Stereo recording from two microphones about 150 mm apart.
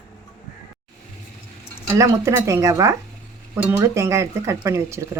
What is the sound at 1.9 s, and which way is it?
A woman's voice, 20° right (ahead or behind).